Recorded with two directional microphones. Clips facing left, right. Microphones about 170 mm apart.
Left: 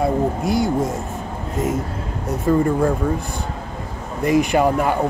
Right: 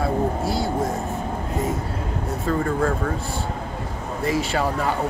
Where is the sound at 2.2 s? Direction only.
20° left (ahead or behind).